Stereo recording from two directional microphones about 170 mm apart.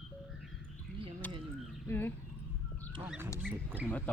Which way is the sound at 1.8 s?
10° left (ahead or behind).